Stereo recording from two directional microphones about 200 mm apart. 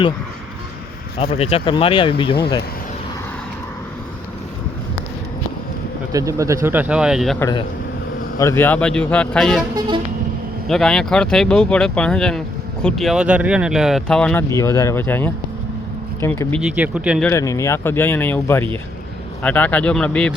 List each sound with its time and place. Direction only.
1.2 s speech: 30° left (ahead or behind)
6.1 s speech: 15° right (ahead or behind)
7.3 s speech: 15° left (ahead or behind)
9.7 s vehicle: 25° right (ahead or behind)
10.7 s speech: centre (ahead or behind)
16.6 s speech: 5° right (ahead or behind)
17.2 s speech: 15° left (ahead or behind)